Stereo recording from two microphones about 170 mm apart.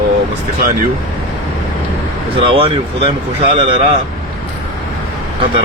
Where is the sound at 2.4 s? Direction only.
30° right (ahead or behind).